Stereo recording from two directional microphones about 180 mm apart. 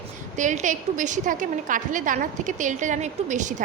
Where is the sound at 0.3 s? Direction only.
45° right (ahead or behind).